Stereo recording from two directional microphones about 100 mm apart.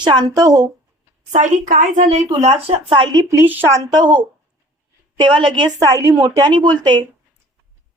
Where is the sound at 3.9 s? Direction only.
45° right (ahead or behind).